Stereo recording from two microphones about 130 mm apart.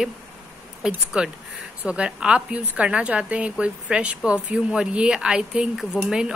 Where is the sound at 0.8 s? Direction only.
5° right (ahead or behind).